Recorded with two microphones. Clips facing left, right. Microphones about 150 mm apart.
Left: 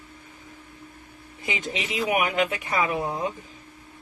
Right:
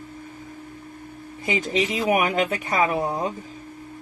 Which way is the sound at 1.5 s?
40° right (ahead or behind).